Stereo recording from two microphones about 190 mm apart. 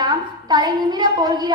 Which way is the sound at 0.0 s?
20° right (ahead or behind).